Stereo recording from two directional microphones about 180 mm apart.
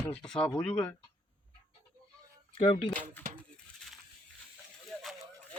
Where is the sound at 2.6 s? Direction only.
35° left (ahead or behind).